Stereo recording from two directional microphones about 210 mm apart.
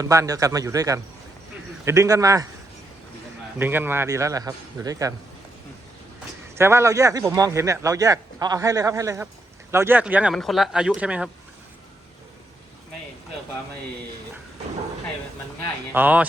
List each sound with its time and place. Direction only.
0.0 s speech: 15° right (ahead or behind)
3.6 s speech: 10° right (ahead or behind)
6.6 s speech: 10° right (ahead or behind)
15.9 s speech: 5° right (ahead or behind)